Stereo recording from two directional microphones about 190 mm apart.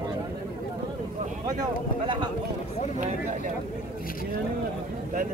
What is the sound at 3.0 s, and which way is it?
Speech, 40° right (ahead or behind).